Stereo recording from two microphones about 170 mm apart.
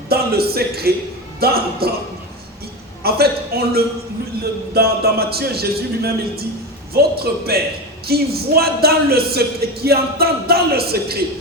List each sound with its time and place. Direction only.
0.1 s speech: 65° right (ahead or behind)
3.0 s speech: 65° right (ahead or behind)